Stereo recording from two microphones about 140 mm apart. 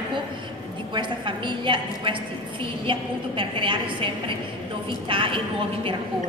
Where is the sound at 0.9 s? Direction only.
35° right (ahead or behind).